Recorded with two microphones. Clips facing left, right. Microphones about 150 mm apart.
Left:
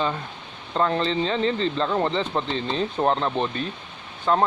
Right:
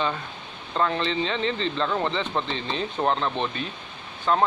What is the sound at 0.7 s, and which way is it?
Speech, 35° left (ahead or behind).